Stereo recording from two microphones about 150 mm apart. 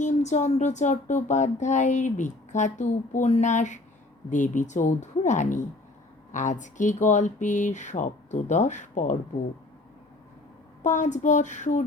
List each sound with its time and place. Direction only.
0.0 s speech: 50° left (ahead or behind)
10.8 s speech: 55° left (ahead or behind)